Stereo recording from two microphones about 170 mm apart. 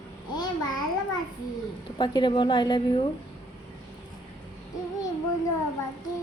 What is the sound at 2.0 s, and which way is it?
Speech, 25° left (ahead or behind).